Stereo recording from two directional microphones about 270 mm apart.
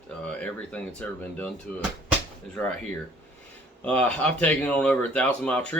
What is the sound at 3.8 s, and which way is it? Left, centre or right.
Speech, centre.